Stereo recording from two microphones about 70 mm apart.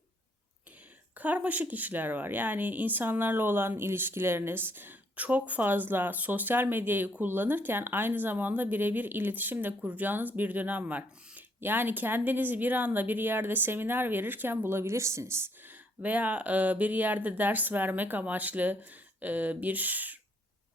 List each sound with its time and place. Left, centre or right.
1.1 s speech: right
15.6 s speech: right